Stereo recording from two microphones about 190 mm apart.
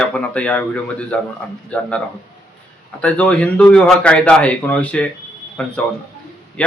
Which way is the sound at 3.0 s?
5° left (ahead or behind).